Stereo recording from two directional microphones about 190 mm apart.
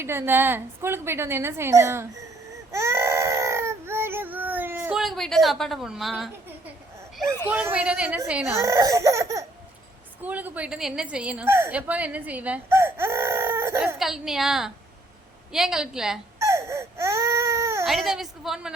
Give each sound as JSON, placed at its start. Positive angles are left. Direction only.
{"t": 0.0, "sound": "a woman's voice", "side_deg": -10}
{"t": 2.7, "sound": "baby cry", "side_deg": -15}
{"t": 7.5, "sound": "a woman's voice", "side_deg": -10}
{"t": 8.5, "sound": "a woman's voice", "side_deg": -15}
{"t": 14.0, "sound": "a woman's voice", "side_deg": 0}
{"t": 16.4, "sound": "baby cry", "side_deg": -15}
{"t": 17.8, "sound": "a woman's voice", "side_deg": 0}